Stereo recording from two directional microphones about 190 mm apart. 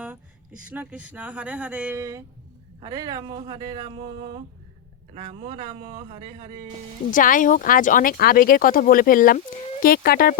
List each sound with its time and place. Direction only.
0.7 s speech: 10° right (ahead or behind); by 6.2 s 30° right (ahead or behind)
7.1 s speech: 45° left (ahead or behind)